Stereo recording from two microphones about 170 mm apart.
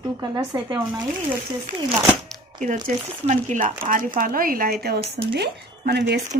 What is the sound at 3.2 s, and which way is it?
Speech, 45° right (ahead or behind).